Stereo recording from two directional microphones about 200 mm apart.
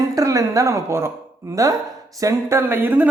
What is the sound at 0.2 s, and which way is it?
Speech, 15° right (ahead or behind).